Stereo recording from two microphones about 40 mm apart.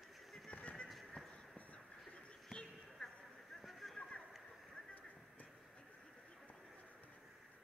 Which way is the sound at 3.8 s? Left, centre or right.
Centre.